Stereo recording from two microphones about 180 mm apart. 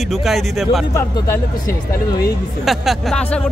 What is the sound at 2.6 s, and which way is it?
Speech, centre (ahead or behind).